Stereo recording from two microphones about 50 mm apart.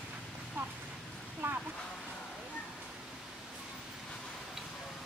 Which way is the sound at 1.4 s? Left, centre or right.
Right.